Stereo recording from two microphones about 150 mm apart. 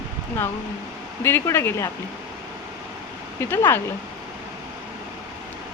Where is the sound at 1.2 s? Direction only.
15° left (ahead or behind).